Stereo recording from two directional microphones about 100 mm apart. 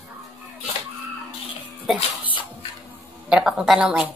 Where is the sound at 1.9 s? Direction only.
5° right (ahead or behind).